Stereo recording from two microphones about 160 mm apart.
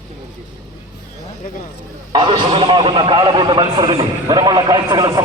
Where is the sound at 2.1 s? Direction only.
30° right (ahead or behind).